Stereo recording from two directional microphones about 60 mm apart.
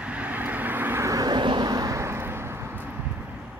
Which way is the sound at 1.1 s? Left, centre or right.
Right.